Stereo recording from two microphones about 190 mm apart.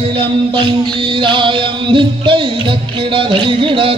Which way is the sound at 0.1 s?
25° right (ahead or behind).